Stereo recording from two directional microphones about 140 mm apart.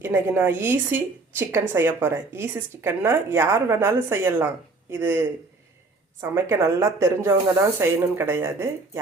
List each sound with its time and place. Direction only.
0.0 s a woman's voice: 15° right (ahead or behind)